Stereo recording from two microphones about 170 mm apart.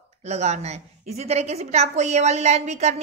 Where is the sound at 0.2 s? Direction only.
40° right (ahead or behind).